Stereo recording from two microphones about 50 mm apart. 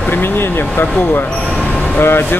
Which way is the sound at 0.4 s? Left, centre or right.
Left.